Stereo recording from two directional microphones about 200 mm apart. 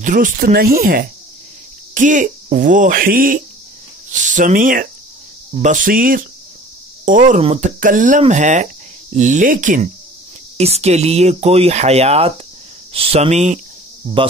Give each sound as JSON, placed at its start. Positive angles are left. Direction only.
{"t": 0.0, "sound": "speech", "side_deg": -40}